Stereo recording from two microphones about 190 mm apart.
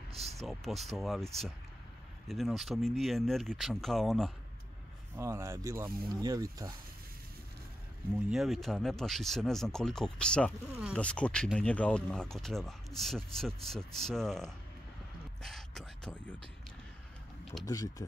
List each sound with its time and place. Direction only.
0.5 s speech: centre (ahead or behind)
5.1 s speech: 15° right (ahead or behind)
8.3 s speech: centre (ahead or behind)
17.6 s speech: 20° left (ahead or behind)